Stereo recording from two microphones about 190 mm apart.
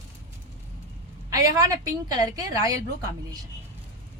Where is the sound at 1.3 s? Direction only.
15° right (ahead or behind).